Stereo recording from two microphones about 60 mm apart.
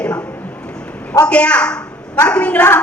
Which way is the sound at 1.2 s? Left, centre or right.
Centre.